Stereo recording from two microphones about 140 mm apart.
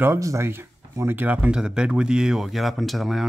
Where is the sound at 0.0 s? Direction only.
20° right (ahead or behind).